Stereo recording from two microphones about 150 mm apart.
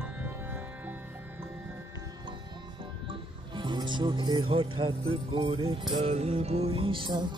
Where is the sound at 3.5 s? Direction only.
30° right (ahead or behind).